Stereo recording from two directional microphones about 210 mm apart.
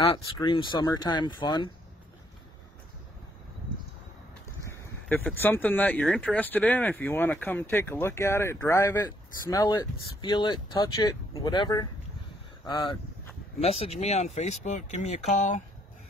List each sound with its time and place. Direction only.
0.0 s speech: 25° left (ahead or behind)
4.6 s speech: 10° left (ahead or behind); by 15.6 s 35° left (ahead or behind)